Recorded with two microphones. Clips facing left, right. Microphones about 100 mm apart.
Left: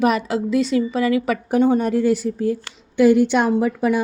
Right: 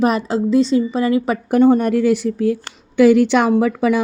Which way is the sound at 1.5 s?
50° right (ahead or behind).